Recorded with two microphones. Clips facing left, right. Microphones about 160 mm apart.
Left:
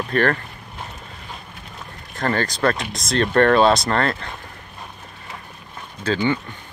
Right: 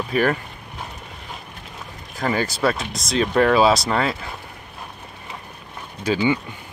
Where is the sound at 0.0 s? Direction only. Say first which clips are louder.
Even; 5° right (ahead or behind).